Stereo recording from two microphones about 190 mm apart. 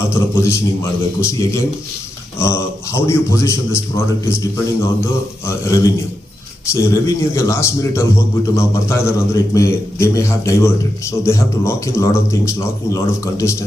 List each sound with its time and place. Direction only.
0.1 s a man's voice: 15° left (ahead or behind)
5.5 s a man's voice: 15° left (ahead or behind)